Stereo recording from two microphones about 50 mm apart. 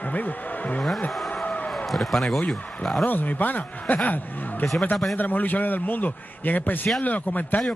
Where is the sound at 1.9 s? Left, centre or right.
Centre.